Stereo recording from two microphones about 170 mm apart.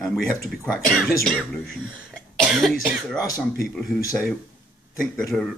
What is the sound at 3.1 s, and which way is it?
Speech, 20° left (ahead or behind).